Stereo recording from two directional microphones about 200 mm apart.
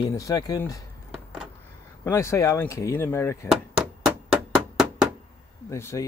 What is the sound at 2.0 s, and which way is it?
Speech, 15° left (ahead or behind).